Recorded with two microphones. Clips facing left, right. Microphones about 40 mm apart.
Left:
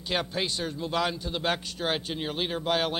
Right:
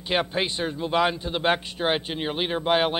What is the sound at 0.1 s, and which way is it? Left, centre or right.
A man's voice, right.